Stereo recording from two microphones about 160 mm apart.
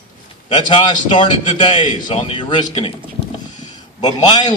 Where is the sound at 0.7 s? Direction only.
30° left (ahead or behind).